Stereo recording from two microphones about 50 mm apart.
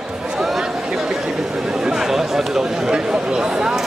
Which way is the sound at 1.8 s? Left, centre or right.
Centre.